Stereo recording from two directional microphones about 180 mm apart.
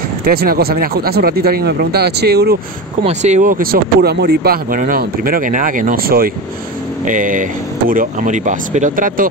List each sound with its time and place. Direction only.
0.2 s speech: 55° right (ahead or behind)
3.0 s speech: 40° right (ahead or behind)